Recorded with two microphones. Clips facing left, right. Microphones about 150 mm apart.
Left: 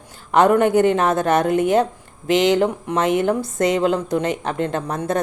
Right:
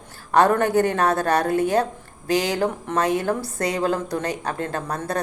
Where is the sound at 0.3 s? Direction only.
20° left (ahead or behind).